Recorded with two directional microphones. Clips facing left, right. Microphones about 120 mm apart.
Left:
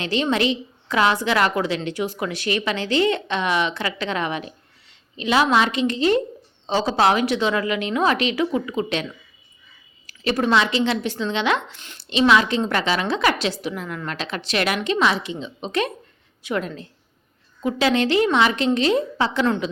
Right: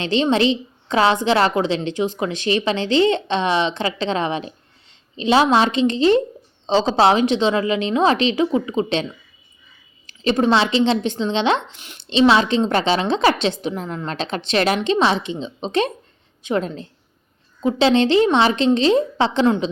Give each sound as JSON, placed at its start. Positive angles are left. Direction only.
{"t": 0.0, "sound": "a woman's voice", "side_deg": -25}
{"t": 10.1, "sound": "a woman's voice", "side_deg": -25}
{"t": 11.8, "sound": "a woman's voice", "side_deg": -15}
{"t": 12.0, "sound": "a woman's voice", "side_deg": -30}